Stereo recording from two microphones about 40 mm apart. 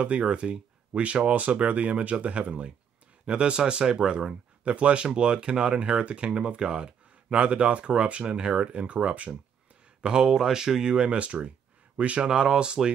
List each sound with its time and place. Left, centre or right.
0.0 s speech: right
4.6 s speech: right
10.0 s speech: centre
11.1 s speech: right
12.2 s speech: centre